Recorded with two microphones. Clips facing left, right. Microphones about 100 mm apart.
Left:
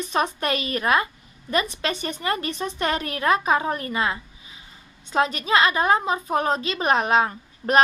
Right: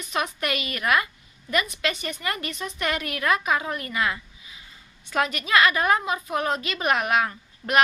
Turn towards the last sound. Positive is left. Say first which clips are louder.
# left 4 dB
turn(degrees=30)  # may be behind; listen again after turning